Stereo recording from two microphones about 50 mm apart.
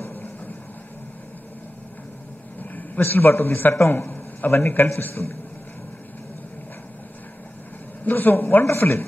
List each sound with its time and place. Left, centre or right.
2.6 s a sound: left
3.0 s a man's voice: left
8.0 s speech: left
8.6 s a man's voice: left